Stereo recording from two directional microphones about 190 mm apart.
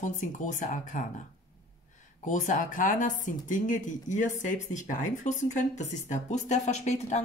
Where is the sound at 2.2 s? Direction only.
40° left (ahead or behind).